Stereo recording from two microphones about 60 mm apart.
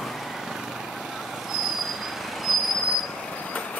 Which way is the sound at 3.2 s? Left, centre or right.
Left.